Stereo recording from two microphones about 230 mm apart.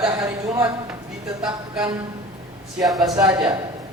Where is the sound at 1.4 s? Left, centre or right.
Centre.